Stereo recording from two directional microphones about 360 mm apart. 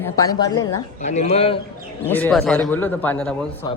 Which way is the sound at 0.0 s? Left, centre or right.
Centre.